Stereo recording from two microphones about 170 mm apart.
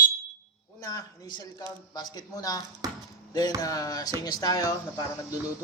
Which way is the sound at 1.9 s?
20° left (ahead or behind).